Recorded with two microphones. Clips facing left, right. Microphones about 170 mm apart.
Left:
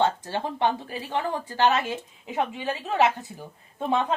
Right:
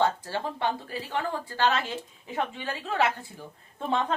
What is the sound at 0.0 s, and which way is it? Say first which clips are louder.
A woman's voice: left 2 dB; 20° left (ahead or behind).